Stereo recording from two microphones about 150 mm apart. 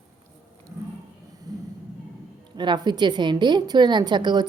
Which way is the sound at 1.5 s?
25° right (ahead or behind).